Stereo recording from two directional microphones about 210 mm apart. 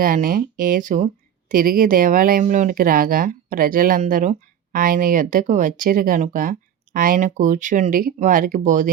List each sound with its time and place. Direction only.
0.0 s speech: 40° right (ahead or behind)